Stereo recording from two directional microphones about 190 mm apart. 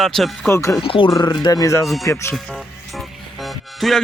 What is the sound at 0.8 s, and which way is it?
Speech, 30° left (ahead or behind).